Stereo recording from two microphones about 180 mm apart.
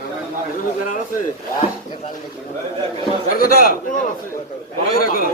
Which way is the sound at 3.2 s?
55° left (ahead or behind).